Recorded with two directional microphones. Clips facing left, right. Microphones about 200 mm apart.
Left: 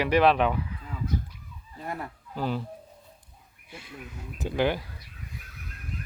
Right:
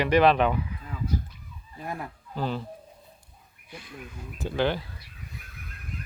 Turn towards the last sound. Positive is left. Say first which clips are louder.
# even
turn(degrees=10)  # may be behind; listen again after turning